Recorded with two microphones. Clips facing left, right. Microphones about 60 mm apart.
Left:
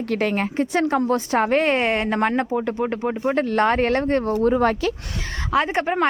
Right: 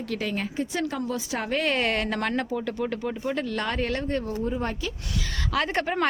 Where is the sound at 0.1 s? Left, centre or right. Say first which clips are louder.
Left 8 dB; left.